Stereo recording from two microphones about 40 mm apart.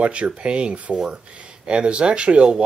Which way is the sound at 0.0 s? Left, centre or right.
Right.